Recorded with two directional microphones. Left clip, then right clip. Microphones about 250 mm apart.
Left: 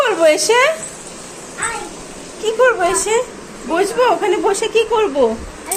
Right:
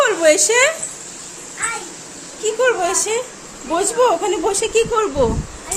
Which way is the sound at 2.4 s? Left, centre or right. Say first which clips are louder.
Left 3 dB; right.